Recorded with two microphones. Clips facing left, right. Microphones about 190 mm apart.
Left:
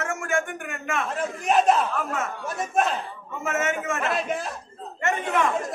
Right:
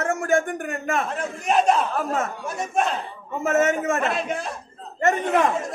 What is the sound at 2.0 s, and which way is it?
Speech, 35° right (ahead or behind).